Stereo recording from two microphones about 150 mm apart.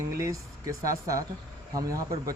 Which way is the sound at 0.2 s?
20° right (ahead or behind).